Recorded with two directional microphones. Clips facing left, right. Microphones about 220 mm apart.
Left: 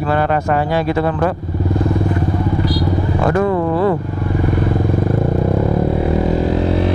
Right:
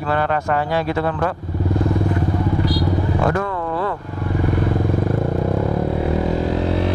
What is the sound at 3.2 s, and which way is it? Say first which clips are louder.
Speech: left 5 dB; 15° left (ahead or behind).